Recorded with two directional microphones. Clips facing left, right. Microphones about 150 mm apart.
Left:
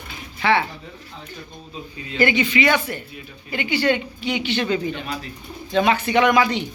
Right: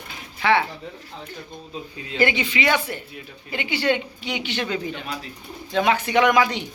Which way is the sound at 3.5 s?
25° right (ahead or behind).